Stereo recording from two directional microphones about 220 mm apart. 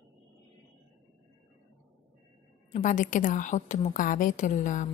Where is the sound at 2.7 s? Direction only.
35° left (ahead or behind).